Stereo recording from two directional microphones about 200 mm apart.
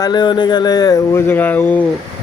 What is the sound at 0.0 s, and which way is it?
Speech, 20° left (ahead or behind).